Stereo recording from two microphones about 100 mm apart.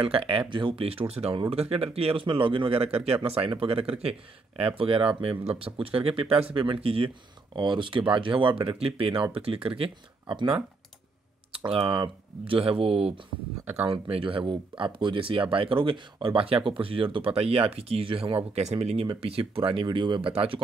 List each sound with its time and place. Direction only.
0.0 s speech: 65° right (ahead or behind)
0.5 s speech: 55° right (ahead or behind)
0.8 s speech: 85° right
1.5 s speech: 75° right (ahead or behind)
5.4 s speech: 90° right
5.8 s speech: 65° right (ahead or behind)
7.5 s speech: 50° right (ahead or behind); by 19.0 s 90° right
19.2 s speech: 70° right (ahead or behind)